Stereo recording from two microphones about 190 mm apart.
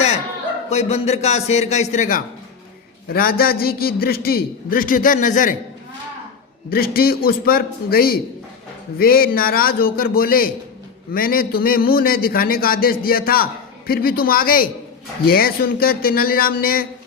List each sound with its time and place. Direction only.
0.7 s a man's voice: 35° left (ahead or behind)
6.7 s a man's voice: 50° left (ahead or behind)